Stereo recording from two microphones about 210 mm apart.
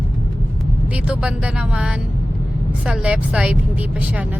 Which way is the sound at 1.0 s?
5° right (ahead or behind).